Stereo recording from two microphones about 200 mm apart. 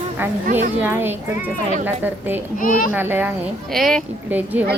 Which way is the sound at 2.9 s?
10° right (ahead or behind).